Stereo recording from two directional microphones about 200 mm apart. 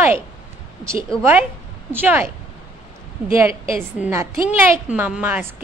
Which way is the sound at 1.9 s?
10° right (ahead or behind).